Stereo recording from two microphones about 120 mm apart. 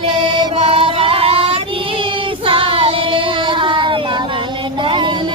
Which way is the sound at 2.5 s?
50° right (ahead or behind).